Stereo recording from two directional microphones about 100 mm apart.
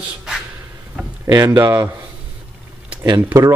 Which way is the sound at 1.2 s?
30° right (ahead or behind).